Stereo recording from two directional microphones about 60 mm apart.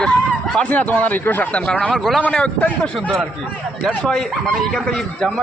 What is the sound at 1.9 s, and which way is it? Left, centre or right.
Speech, centre.